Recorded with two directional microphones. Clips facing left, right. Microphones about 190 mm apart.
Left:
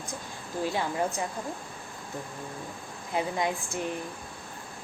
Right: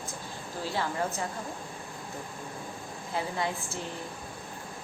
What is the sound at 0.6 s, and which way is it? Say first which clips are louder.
Speech: left 3 dB; 15° left (ahead or behind).